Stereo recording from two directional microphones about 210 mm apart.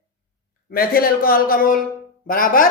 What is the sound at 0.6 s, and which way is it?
A man's voice, 45° left (ahead or behind).